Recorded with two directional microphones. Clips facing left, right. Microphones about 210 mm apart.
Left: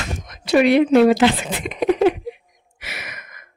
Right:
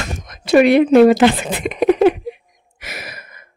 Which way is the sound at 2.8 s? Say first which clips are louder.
Right 3 dB; 40° right (ahead or behind).